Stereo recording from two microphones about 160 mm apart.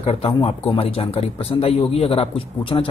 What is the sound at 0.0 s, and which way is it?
Speech, 35° left (ahead or behind).